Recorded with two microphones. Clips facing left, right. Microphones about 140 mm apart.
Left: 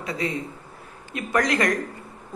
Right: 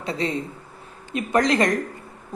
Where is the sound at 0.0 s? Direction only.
25° right (ahead or behind).